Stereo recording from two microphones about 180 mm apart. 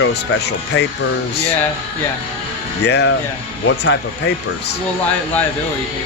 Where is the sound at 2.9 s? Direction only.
70° left (ahead or behind).